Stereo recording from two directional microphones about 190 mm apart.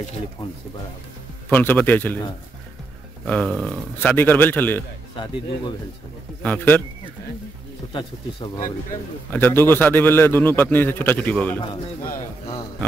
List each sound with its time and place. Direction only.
1.5 s a man's voice: 10° left (ahead or behind)
3.3 s a man's voice: 5° left (ahead or behind)
5.1 s speech: 25° left (ahead or behind)
6.4 s a man's voice: 10° left (ahead or behind)
9.3 s a man's voice: 10° left (ahead or behind)